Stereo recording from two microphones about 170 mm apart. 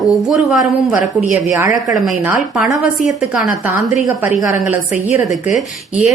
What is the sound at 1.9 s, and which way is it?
Speech, 5° right (ahead or behind).